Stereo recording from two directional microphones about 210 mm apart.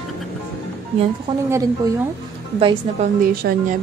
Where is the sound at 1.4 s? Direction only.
15° right (ahead or behind).